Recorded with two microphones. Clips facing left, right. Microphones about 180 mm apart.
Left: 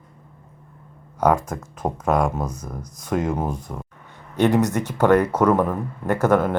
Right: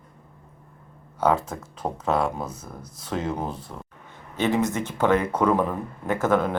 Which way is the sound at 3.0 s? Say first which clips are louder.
Left 5 dB; 10° left (ahead or behind).